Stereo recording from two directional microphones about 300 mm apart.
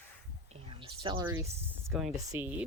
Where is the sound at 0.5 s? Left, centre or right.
Centre.